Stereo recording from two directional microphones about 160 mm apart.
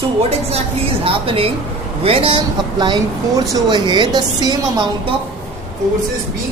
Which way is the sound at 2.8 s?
25° right (ahead or behind).